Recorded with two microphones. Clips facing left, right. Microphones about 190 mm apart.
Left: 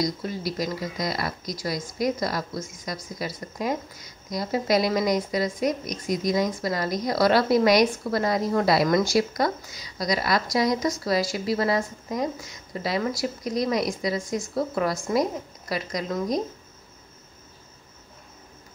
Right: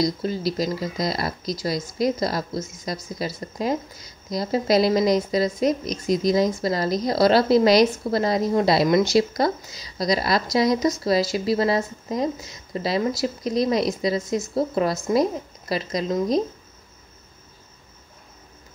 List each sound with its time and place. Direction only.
0.0 s a woman's voice: 30° right (ahead or behind)